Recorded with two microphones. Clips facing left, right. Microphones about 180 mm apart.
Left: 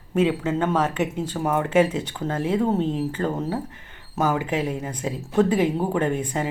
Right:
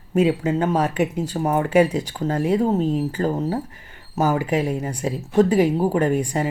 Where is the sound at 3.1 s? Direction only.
35° right (ahead or behind).